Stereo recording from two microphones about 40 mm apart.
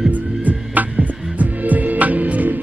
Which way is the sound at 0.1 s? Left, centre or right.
Right.